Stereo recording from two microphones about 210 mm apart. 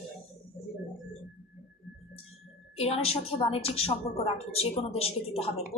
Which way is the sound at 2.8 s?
30° left (ahead or behind).